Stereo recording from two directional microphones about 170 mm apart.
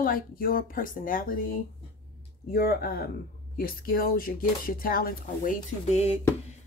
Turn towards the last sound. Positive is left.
turn(degrees=40)  # may be behind; listen again after turning